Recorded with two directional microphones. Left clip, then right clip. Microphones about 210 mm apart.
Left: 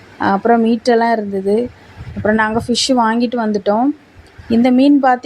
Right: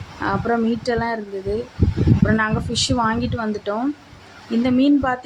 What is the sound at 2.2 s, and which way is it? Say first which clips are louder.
Speech: left 9 dB; 25° left (ahead or behind).